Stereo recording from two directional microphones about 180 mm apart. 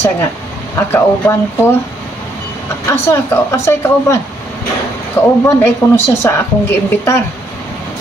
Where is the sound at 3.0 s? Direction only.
15° left (ahead or behind).